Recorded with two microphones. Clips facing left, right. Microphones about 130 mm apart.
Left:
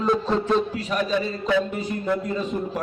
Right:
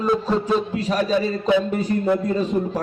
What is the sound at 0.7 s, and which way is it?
Speech, 30° right (ahead or behind).